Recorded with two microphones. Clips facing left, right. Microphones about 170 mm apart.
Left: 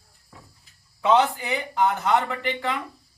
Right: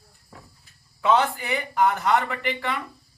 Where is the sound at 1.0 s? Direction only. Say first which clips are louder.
Left 1 dB; 20° left (ahead or behind).